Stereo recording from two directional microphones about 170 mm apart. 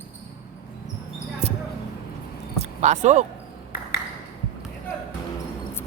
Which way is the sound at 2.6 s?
45° right (ahead or behind).